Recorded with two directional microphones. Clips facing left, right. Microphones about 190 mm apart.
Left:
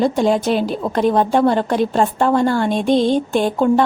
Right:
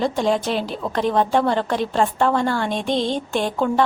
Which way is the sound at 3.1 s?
45° left (ahead or behind).